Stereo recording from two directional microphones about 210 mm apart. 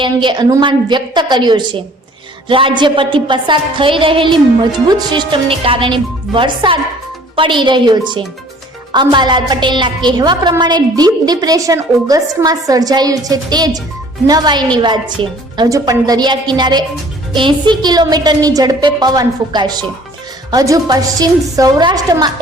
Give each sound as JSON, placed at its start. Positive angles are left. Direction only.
{"t": 0.0, "sound": "a woman's voice", "side_deg": -20}